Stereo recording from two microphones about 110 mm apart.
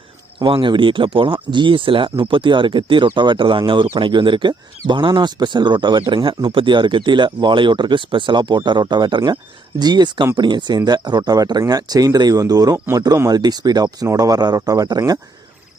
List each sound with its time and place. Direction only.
0.3 s speech: 50° right (ahead or behind)